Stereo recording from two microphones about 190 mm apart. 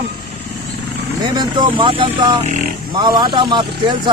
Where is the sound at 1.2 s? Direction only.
25° right (ahead or behind).